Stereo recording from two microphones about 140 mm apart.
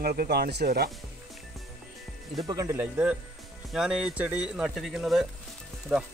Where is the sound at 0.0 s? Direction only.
90° right.